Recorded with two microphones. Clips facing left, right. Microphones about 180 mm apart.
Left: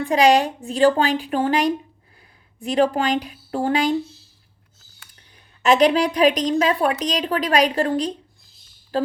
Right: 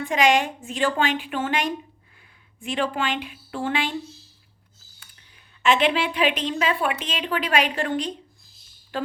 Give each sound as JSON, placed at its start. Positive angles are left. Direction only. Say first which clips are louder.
{"t": 0.0, "sound": "a woman's voice", "louder": "left 4 dB", "side_deg": 35}
{"t": 5.6, "sound": "a woman's voice", "louder": "left 5 dB", "side_deg": 40}